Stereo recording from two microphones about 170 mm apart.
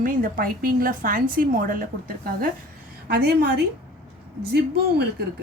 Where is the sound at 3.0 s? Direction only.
70° right (ahead or behind).